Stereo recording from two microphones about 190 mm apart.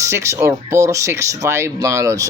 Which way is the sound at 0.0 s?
15° right (ahead or behind).